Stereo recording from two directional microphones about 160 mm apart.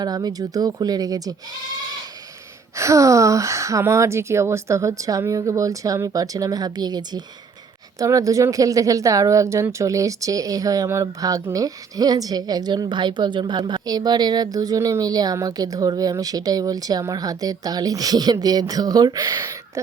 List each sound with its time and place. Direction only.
0.0 s speech: 25° right (ahead or behind)